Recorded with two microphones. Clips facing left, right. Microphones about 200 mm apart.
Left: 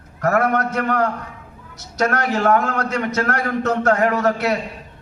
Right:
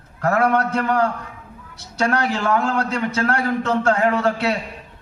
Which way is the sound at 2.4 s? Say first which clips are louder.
Left 3 dB; 50° left (ahead or behind).